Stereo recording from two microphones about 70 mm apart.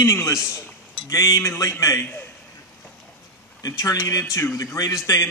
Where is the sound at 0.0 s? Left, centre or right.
Left.